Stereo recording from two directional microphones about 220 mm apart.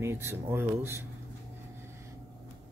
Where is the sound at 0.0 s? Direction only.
10° right (ahead or behind).